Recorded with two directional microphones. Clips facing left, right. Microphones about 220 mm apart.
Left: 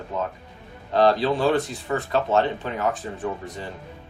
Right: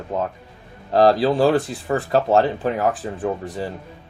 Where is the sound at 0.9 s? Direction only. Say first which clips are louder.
Right 4 dB; 35° right (ahead or behind).